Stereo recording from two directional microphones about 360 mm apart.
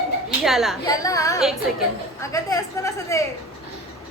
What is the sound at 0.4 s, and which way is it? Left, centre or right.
A woman's voice, centre.